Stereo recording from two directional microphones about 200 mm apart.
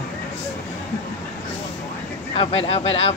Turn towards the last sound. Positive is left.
turn(degrees=30)  # may be behind; listen again after turning